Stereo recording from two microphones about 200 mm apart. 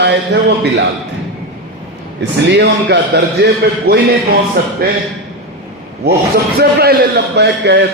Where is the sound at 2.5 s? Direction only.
60° right (ahead or behind).